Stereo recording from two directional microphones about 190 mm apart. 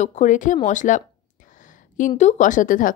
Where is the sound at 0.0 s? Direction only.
40° left (ahead or behind).